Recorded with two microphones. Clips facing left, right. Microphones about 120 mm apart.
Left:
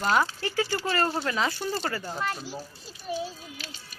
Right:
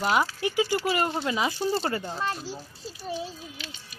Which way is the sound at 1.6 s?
25° right (ahead or behind).